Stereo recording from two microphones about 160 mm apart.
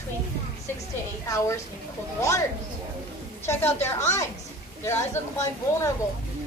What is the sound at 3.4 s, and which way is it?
A woman's voice, 15° left (ahead or behind).